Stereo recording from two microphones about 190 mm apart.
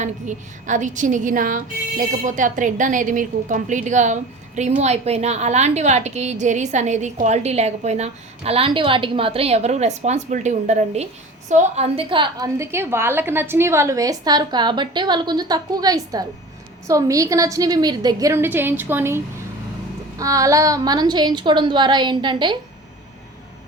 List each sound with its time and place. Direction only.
0.0 s a woman's voice: 40° right (ahead or behind); by 22.5 s 25° right (ahead or behind)